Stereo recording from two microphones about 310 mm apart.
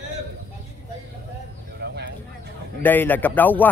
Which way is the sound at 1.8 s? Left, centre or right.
Right.